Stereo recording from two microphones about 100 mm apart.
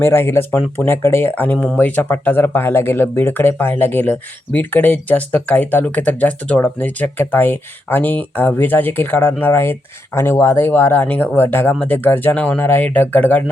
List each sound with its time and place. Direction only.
0.0 s speech: 25° left (ahead or behind)